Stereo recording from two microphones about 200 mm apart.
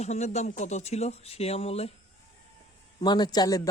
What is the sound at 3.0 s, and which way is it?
Speech, 20° left (ahead or behind).